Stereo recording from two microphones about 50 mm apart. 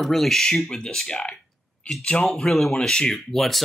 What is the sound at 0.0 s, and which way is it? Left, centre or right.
Speech, centre.